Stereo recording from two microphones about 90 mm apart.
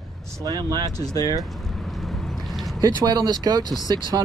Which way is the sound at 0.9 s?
45° left (ahead or behind).